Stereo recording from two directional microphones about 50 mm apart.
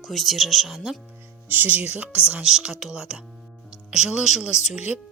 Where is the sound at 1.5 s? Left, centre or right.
Right.